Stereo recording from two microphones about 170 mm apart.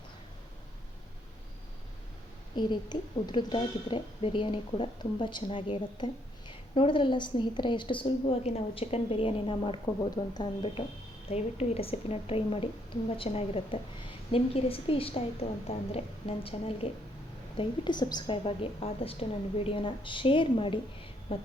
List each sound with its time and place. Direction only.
2.6 s a woman's voice: 25° left (ahead or behind)